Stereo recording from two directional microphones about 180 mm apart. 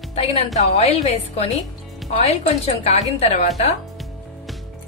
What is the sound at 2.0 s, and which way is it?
Music, centre (ahead or behind).